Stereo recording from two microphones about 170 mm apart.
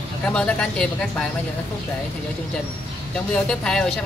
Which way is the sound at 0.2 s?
5° left (ahead or behind).